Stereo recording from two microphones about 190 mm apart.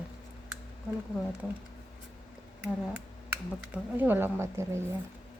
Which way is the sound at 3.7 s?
10° right (ahead or behind).